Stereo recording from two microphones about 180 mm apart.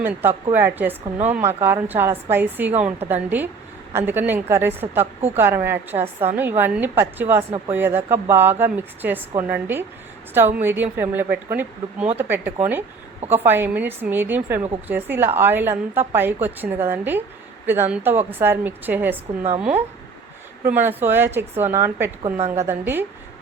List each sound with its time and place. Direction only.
0.0 s a woman's voice: 10° right (ahead or behind)
19.4 s a woman's voice: 35° right (ahead or behind)
20.7 s a woman's voice: 10° right (ahead or behind)